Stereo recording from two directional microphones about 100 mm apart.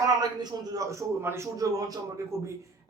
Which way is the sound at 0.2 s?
40° right (ahead or behind).